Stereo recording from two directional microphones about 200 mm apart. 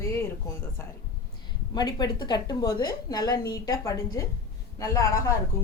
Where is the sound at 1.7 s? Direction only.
20° left (ahead or behind).